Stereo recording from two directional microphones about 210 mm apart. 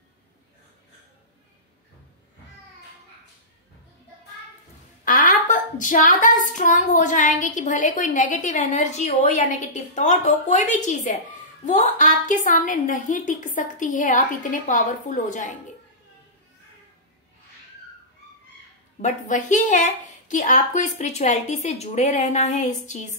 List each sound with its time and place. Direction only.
5.0 s a woman's voice: 40° left (ahead or behind)
18.9 s a woman's voice: 35° left (ahead or behind)